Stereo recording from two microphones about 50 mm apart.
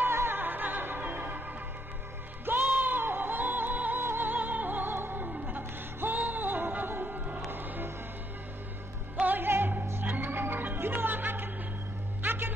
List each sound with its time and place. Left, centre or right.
0.0 s music: right
2.4 s music: right
4.9 s opera: right
5.5 s music: right
9.2 s music: right